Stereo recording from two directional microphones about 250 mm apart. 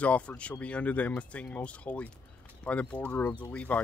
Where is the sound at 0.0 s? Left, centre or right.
Centre.